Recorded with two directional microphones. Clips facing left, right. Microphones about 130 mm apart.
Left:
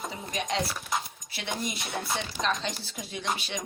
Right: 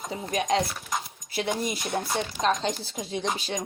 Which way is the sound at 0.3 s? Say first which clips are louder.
Right 6 dB; 45° right (ahead or behind).